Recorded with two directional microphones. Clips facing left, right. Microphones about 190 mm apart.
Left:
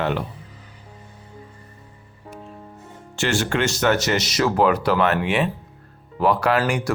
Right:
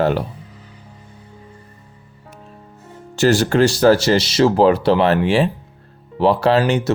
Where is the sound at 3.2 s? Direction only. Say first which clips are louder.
Right 8 dB; 35° right (ahead or behind).